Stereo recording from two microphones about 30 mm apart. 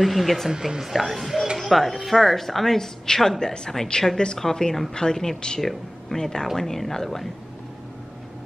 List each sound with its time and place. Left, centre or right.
0.0 s speech: centre
0.5 s a woman's voice: centre
1.6 s a woman's voice: centre
3.3 s a woman's voice: left
5.6 s speech: centre
6.1 s a woman's voice: centre